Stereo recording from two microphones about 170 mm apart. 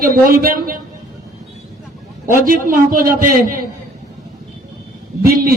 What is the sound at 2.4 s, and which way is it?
A man's voice, 55° right (ahead or behind).